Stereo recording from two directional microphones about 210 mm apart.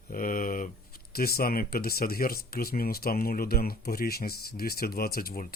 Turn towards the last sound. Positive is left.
turn(degrees=45)  # may be behind; listen again after turning